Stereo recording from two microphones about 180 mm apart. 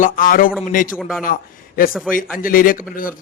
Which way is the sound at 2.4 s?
50° left (ahead or behind).